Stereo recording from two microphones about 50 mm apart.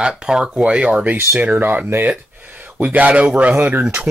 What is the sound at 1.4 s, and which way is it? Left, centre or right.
Speech, right.